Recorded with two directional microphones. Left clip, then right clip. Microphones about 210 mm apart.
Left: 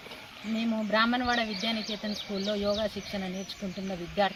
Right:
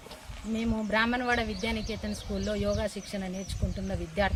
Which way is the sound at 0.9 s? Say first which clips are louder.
Left 1 dB; 20° right (ahead or behind).